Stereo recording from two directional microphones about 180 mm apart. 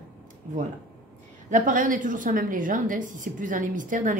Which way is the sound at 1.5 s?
45° right (ahead or behind).